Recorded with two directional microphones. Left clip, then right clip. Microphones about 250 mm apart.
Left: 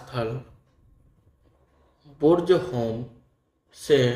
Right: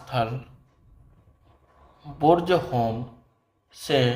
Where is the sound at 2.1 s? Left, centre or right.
Centre.